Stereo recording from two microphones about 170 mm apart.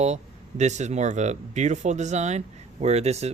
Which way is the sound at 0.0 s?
40° right (ahead or behind).